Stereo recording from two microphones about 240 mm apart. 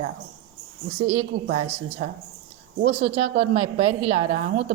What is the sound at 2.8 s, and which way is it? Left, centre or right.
A woman's voice, right.